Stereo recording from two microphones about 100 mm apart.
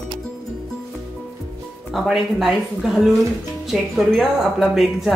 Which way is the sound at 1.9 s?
5° right (ahead or behind).